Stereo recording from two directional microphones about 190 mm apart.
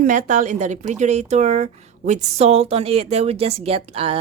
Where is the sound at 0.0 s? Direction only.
40° right (ahead or behind).